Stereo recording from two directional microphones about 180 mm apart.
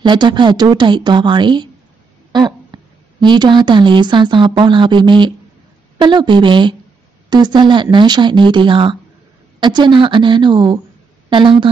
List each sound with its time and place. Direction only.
0.0 s a woman's voice: 25° right (ahead or behind)